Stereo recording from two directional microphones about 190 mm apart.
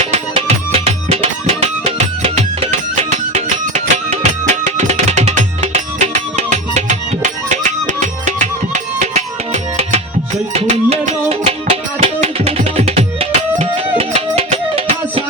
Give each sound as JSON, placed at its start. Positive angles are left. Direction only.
{"t": 0.0, "sound": "music", "side_deg": -35}